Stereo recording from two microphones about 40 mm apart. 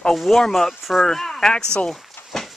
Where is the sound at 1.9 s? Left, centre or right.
Centre.